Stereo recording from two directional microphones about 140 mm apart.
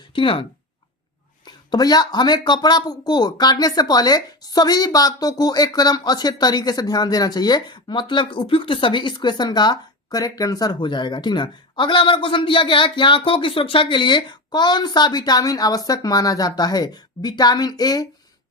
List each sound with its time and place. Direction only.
0.1 s speech: 40° left (ahead or behind)
1.5 s speech: 30° left (ahead or behind)